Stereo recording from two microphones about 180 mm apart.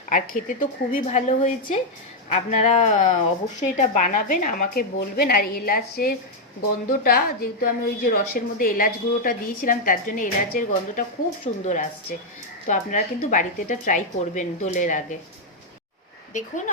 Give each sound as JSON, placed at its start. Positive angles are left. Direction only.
{"t": 0.1, "sound": "a woman's voice", "side_deg": 50}